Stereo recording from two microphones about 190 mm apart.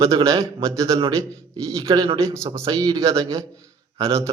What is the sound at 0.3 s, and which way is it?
A man's voice, 15° right (ahead or behind).